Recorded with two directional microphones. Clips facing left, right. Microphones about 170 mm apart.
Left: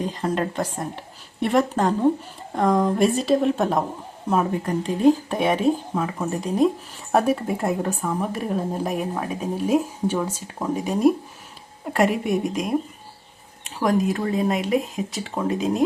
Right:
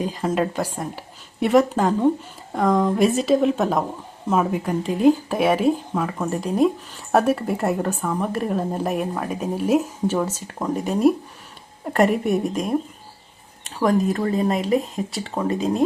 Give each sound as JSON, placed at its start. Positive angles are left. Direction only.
{"t": 0.2, "sound": "speech", "side_deg": -5}
{"t": 12.3, "sound": "speech", "side_deg": 0}
{"t": 13.8, "sound": "speech", "side_deg": 0}